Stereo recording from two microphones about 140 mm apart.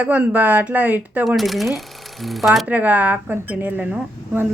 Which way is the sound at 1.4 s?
Centre (ahead or behind).